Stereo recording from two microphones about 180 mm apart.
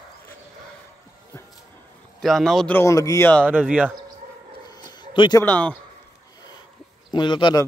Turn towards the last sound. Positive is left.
turn(degrees=25)  # may be behind; listen again after turning